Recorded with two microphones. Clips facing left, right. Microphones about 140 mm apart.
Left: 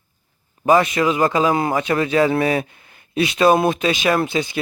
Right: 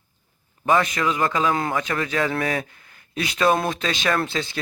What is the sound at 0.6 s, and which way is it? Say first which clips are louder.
A man's voice: left 5 dB; 20° left (ahead or behind).